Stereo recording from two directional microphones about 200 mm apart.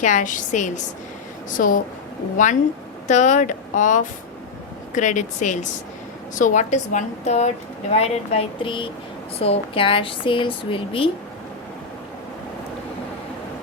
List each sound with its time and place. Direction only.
0.0 s a woman's voice: 40° left (ahead or behind)
3.1 s a woman's voice: 35° left (ahead or behind)